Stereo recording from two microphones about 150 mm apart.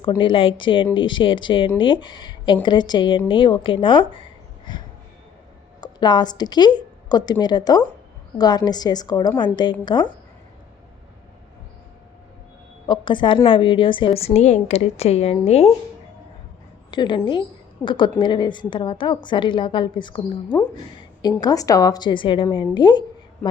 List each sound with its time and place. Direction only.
0.2 s a woman's voice: 35° left (ahead or behind)
5.8 s a woman's voice: 30° left (ahead or behind)
12.9 s a woman's voice: 30° left (ahead or behind)
16.9 s a woman's voice: 30° left (ahead or behind)
21.4 s a woman's voice: 25° left (ahead or behind)